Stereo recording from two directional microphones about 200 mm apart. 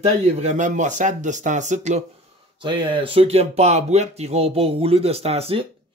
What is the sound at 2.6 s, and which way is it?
Speech, 25° right (ahead or behind).